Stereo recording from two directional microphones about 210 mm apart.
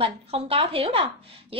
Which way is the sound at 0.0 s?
25° right (ahead or behind).